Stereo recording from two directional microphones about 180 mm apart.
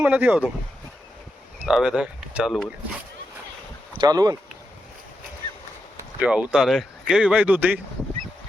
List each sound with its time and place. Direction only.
0.0 s speech: 5° right (ahead or behind)
1.6 s speech: 5° right (ahead or behind)
3.9 s speech: 20° right (ahead or behind)
6.1 s speech: 5° right (ahead or behind)